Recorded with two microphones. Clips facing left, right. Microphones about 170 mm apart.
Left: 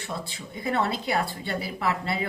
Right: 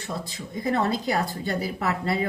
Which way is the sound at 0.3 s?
40° right (ahead or behind).